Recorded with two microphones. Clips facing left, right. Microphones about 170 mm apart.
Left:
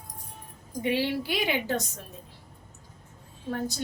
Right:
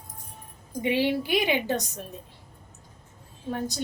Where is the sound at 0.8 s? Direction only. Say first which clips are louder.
Right 3 dB; 15° right (ahead or behind).